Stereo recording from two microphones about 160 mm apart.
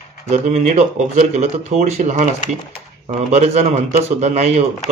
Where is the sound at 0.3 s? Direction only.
45° right (ahead or behind).